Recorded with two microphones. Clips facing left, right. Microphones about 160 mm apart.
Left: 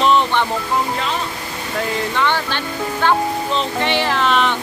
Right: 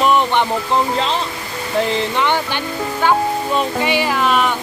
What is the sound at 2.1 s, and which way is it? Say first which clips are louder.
Speech: right 1 dB; 15° right (ahead or behind).